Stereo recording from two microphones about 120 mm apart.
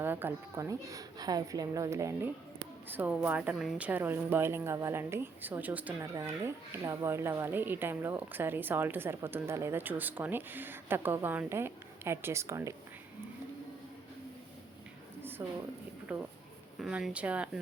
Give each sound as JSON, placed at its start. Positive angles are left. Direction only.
{"t": 0.0, "sound": "speech", "side_deg": -20}
{"t": 2.9, "sound": "a woman's voice", "side_deg": -15}
{"t": 3.6, "sound": "a woman's voice", "side_deg": 0}
{"t": 3.8, "sound": "a woman's voice", "side_deg": -15}
{"t": 6.0, "sound": "speech", "side_deg": -25}
{"t": 15.2, "sound": "a sound", "side_deg": -15}
{"t": 16.1, "sound": "a woman's voice", "side_deg": -10}